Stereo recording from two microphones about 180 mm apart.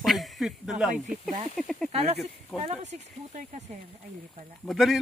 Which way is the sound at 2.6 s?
40° right (ahead or behind).